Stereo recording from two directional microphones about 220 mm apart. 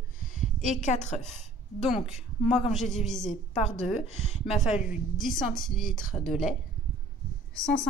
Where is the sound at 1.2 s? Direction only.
Centre (ahead or behind).